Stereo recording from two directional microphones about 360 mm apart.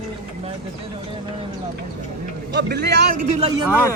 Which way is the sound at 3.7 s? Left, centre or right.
Centre.